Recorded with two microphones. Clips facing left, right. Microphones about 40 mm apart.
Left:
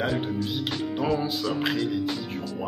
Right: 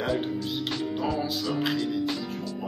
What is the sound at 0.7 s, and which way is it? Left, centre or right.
Speech, centre.